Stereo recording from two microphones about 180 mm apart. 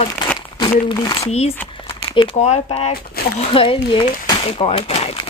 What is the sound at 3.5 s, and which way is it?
Speech, 30° left (ahead or behind).